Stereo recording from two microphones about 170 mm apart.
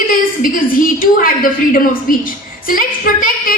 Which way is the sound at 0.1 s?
55° left (ahead or behind).